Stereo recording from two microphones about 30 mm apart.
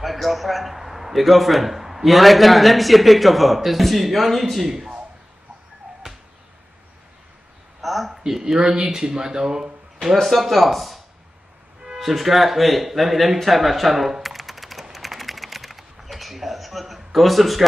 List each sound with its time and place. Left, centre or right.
0.0 s a sound: centre
1.1 s a man's voice: centre
2.0 s a man's voice: centre
7.8 s a sound: centre
8.3 s speech: centre
10.2 s a man's voice: centre
12.0 s a man's voice: centre
14.2 s typing: centre